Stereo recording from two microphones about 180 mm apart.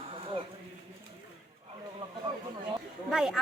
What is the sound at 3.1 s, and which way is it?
Speech, 5° right (ahead or behind).